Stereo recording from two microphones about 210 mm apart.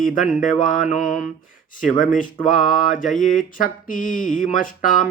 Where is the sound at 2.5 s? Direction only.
40° left (ahead or behind).